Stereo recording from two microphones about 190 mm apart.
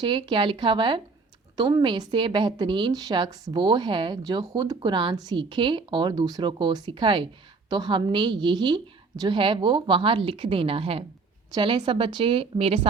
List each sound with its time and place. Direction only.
0.0 s a woman's voice: 25° right (ahead or behind)